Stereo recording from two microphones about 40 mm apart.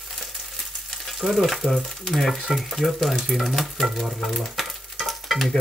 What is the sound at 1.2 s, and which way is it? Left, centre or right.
Speech, centre.